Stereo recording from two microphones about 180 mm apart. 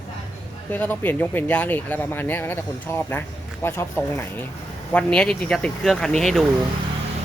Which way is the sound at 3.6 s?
15° left (ahead or behind).